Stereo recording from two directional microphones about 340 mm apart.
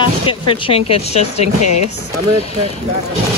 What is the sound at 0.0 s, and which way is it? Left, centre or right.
Speech, centre.